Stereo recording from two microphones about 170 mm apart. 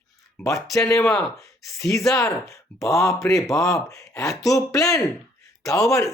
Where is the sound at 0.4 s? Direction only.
20° left (ahead or behind).